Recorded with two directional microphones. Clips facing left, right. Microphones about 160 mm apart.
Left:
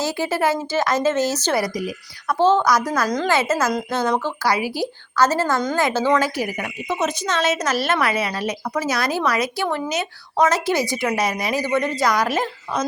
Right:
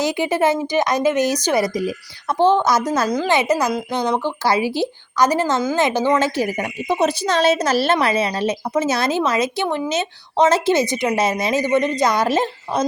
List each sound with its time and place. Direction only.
0.0 s a woman's voice: 20° right (ahead or behind)